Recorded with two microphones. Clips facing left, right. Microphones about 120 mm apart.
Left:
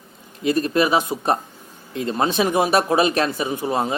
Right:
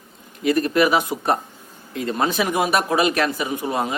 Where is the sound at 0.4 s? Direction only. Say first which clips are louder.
Right 1 dB; 25° left (ahead or behind).